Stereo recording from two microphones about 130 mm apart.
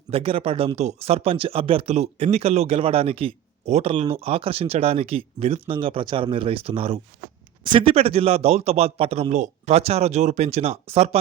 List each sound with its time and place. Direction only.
0.1 s speech: 45° right (ahead or behind)
9.3 s speech: 60° right (ahead or behind)